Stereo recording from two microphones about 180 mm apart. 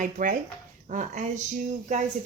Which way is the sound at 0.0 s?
50° right (ahead or behind).